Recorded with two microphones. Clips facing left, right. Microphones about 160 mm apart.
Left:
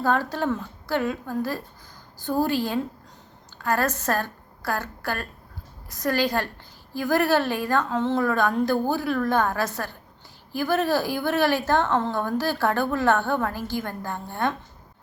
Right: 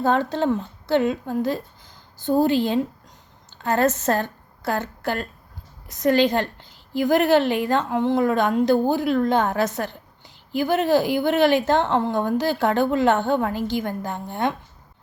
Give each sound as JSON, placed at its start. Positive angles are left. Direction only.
{"t": 0.0, "sound": "a woman's voice", "side_deg": -20}